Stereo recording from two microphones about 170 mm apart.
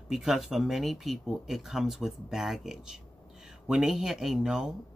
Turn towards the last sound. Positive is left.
turn(degrees=-5)  # may be behind; listen again after turning